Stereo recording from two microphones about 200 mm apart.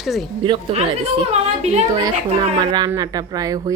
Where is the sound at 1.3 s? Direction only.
35° right (ahead or behind).